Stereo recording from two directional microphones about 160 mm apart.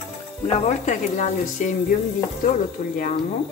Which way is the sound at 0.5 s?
45° left (ahead or behind).